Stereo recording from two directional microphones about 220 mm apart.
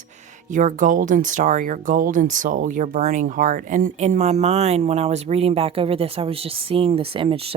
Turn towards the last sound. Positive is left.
turn(degrees=-25)  # may be behind; listen again after turning